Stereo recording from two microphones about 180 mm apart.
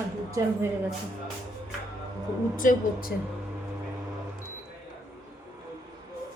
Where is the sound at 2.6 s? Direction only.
50° left (ahead or behind).